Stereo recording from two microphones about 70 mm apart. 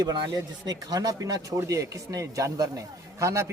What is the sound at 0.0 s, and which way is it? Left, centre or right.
Speech, right.